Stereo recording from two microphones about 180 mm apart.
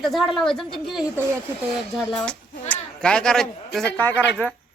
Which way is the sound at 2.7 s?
5° left (ahead or behind).